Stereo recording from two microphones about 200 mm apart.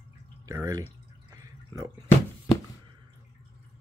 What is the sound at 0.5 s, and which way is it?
Speech, 15° right (ahead or behind).